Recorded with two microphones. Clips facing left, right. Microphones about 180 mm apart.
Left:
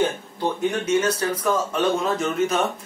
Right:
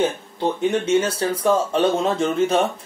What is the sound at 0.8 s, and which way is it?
Speech, 30° right (ahead or behind).